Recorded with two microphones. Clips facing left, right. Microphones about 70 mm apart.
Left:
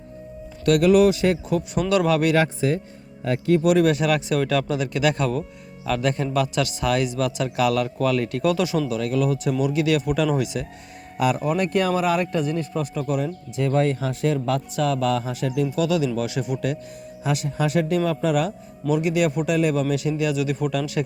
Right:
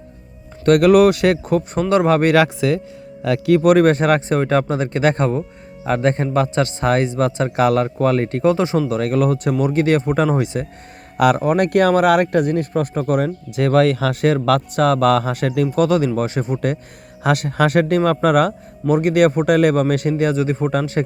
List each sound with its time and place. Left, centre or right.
0.6 s speech: right
1.5 s speech: right
1.8 s speech: right
2.3 s speech: right
3.6 s speech: right
8.9 s speech: right
11.2 s speech: right
17.2 s speech: right